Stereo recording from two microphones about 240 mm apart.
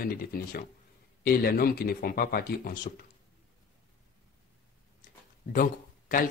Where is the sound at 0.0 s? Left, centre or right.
Left.